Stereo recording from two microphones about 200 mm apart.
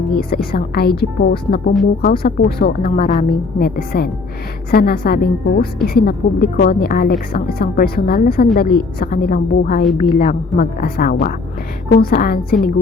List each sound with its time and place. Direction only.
0.1 s a woman's voice: 50° left (ahead or behind)
2.9 s a woman's voice: 30° left (ahead or behind)
3.6 s a woman's voice: 50° left (ahead or behind)